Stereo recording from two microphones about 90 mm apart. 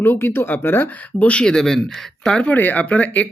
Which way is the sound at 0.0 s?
25° left (ahead or behind).